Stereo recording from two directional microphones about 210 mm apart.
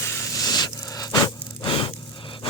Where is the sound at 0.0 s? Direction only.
15° left (ahead or behind).